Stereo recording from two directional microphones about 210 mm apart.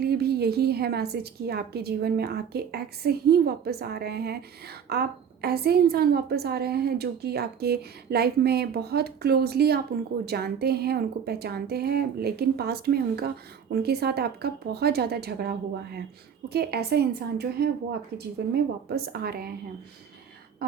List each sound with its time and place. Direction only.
0.0 s a woman's voice: 50° right (ahead or behind)